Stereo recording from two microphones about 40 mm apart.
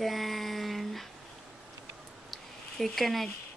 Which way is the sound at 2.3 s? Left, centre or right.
Centre.